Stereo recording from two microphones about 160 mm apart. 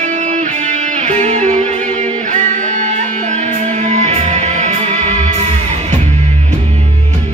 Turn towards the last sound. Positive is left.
turn(degrees=-45)  # may be behind; listen again after turning